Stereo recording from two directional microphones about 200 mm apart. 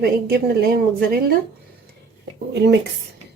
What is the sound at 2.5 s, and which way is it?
Speech, 60° right (ahead or behind).